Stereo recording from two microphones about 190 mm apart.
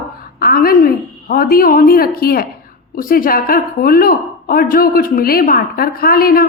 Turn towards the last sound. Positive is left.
turn(degrees=50)  # may be behind; listen again after turning